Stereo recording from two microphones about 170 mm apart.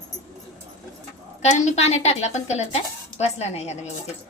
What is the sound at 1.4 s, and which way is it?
A woman's voice, 40° left (ahead or behind).